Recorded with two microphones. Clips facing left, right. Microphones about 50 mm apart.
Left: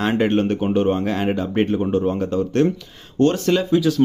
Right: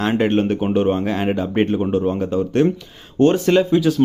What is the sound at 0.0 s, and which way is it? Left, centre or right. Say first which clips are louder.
Speech: right 1 dB; centre.